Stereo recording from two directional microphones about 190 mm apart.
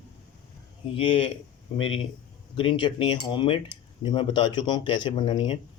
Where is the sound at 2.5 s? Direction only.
25° left (ahead or behind).